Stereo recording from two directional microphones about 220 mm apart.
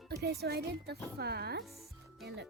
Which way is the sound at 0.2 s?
45° right (ahead or behind).